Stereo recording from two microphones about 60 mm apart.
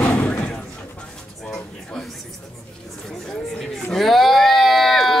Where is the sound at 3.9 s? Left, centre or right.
Centre.